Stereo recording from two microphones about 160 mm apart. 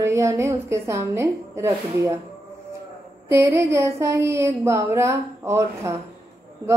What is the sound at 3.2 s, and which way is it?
A woman's voice, 15° right (ahead or behind).